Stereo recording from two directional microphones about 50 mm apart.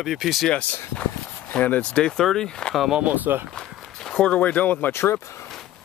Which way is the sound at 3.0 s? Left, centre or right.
Right.